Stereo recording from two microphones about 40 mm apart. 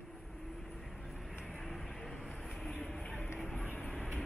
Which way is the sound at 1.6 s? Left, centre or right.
Centre.